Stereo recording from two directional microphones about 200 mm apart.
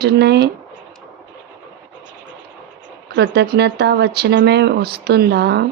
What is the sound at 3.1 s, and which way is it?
Speech, 60° right (ahead or behind).